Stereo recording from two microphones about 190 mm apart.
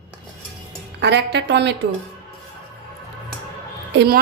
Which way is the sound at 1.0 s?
65° right (ahead or behind).